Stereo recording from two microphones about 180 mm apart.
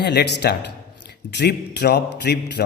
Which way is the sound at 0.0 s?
70° left (ahead or behind).